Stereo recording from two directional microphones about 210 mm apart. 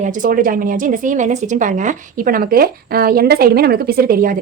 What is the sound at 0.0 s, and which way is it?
Speech, 40° right (ahead or behind).